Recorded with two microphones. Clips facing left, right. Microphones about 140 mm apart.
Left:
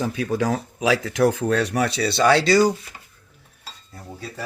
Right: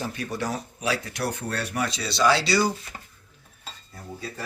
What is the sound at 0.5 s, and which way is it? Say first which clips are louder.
Speech: left 7 dB; 90° left.